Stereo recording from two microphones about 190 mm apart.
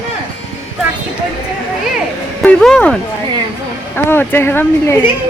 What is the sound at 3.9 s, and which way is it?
Speech, 10° left (ahead or behind).